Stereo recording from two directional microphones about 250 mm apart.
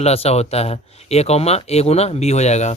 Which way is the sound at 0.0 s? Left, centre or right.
Left.